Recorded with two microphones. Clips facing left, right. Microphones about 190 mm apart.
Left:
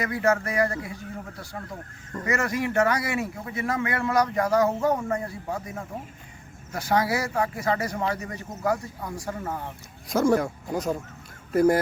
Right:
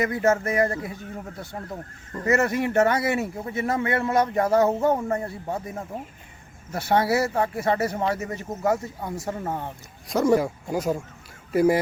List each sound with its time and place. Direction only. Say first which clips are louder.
0.0 s speech: right 2 dB; 25° right (ahead or behind)
2.2 s speech: right 4 dB; 25° right (ahead or behind)
10.1 s speech: right 1 dB; centre (ahead or behind)